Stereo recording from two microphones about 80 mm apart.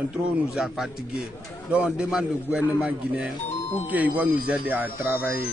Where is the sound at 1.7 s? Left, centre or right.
Centre.